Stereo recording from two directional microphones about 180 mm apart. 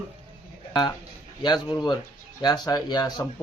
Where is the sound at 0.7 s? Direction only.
20° left (ahead or behind).